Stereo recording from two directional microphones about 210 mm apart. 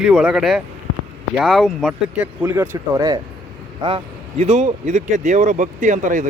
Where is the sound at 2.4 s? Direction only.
10° right (ahead or behind).